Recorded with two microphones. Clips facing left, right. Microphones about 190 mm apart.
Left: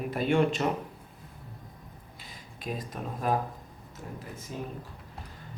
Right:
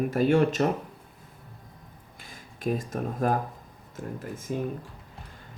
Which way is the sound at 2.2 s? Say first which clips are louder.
Right 6 dB; 50° right (ahead or behind).